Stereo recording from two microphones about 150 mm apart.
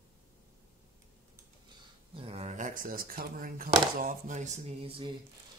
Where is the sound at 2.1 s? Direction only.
40° right (ahead or behind).